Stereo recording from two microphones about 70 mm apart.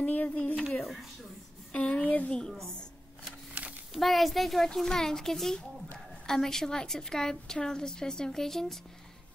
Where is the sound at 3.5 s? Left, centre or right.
Centre.